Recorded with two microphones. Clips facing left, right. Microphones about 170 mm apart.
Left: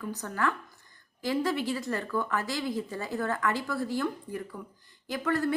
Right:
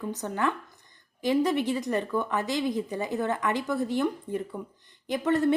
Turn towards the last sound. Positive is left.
turn(degrees=-20)  # may be behind; listen again after turning